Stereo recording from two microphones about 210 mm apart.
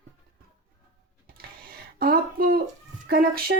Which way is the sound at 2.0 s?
45° right (ahead or behind).